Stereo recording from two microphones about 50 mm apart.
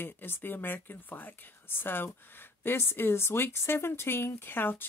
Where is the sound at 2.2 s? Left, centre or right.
Left.